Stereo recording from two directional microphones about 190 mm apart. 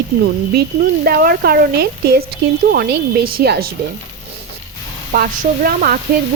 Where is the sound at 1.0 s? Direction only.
55° right (ahead or behind).